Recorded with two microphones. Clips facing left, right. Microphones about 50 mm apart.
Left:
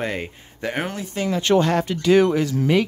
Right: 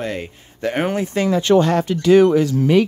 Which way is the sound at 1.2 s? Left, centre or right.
Right.